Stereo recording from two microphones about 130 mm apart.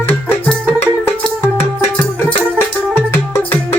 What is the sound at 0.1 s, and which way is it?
Music, 15° left (ahead or behind).